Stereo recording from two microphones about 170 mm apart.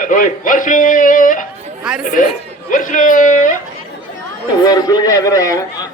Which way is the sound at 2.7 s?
50° left (ahead or behind).